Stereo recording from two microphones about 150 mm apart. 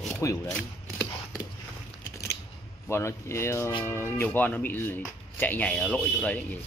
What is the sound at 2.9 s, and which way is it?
Speech, 20° left (ahead or behind).